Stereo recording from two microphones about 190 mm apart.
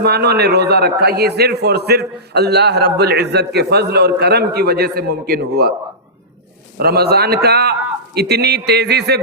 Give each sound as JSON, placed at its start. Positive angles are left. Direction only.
{"t": 0.0, "sound": "a man's voice", "side_deg": -60}
{"t": 6.7, "sound": "a man's voice", "side_deg": -55}